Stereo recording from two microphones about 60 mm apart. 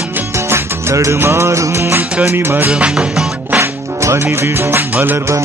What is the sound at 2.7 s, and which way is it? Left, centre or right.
Music, centre.